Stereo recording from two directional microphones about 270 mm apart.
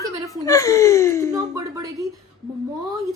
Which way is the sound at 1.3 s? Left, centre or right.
Centre.